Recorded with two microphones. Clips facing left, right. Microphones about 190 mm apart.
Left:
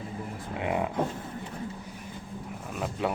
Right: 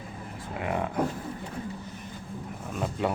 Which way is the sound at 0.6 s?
20° left (ahead or behind).